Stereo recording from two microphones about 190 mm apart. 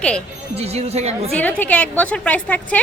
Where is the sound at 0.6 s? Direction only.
30° right (ahead or behind).